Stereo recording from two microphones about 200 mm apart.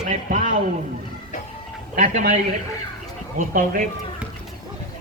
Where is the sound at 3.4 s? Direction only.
40° right (ahead or behind).